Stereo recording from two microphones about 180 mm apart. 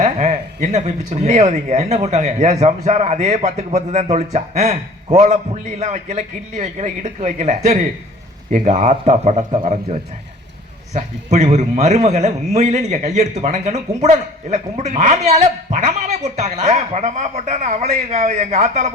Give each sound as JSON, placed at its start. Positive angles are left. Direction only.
{"t": 0.0, "sound": "a man's voice", "side_deg": -40}
{"t": 10.9, "sound": "a man's voice", "side_deg": -40}